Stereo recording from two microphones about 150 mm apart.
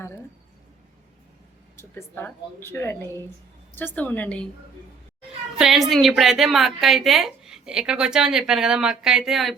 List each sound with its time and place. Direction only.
1.7 s speech: 15° left (ahead or behind)
5.5 s a woman's voice: centre (ahead or behind)